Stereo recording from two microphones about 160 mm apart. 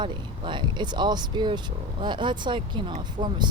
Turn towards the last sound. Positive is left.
turn(degrees=-30)  # may be behind; listen again after turning